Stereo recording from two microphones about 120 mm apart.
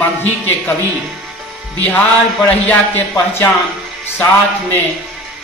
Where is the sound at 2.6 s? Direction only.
15° left (ahead or behind).